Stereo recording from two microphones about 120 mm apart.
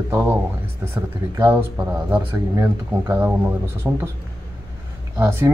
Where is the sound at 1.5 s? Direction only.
15° right (ahead or behind).